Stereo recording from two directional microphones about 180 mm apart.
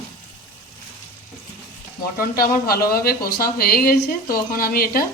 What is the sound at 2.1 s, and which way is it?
A woman's voice, 55° left (ahead or behind).